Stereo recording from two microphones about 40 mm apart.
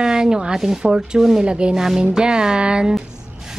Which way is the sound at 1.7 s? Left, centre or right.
Centre.